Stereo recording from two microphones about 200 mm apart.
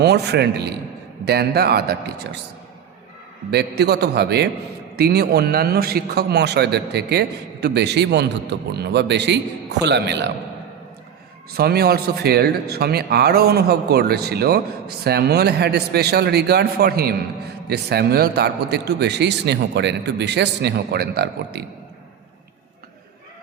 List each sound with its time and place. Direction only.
0.0 s a man's voice: 55° right (ahead or behind)
3.5 s a man's voice: 55° right (ahead or behind)
11.5 s a man's voice: 50° right (ahead or behind)